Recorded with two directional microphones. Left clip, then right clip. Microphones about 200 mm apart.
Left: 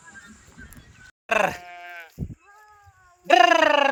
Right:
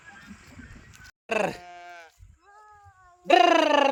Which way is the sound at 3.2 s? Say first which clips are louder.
Left 3 dB; 5° left (ahead or behind).